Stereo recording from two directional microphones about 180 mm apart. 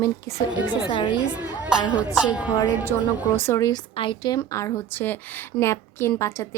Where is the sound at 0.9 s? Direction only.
30° left (ahead or behind).